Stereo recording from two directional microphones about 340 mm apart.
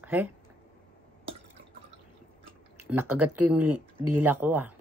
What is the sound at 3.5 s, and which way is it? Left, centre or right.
Speech, centre.